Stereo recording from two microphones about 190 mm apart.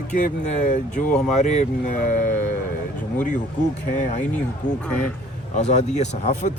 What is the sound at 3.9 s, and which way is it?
Speech, 40° left (ahead or behind).